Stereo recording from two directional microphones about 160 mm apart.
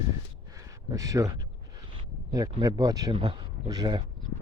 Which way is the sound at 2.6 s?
25° right (ahead or behind).